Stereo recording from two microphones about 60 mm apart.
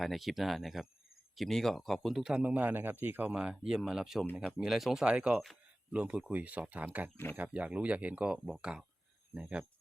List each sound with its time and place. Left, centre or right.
0.0 s speech: centre
2.4 s speech: right
3.2 s speech: centre
3.8 s speech: centre
5.0 s speech: centre